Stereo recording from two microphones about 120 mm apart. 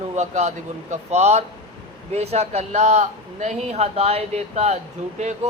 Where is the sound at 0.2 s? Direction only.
80° right.